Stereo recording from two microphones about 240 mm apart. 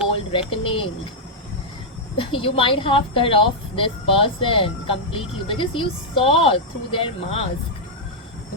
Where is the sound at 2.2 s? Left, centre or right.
Left.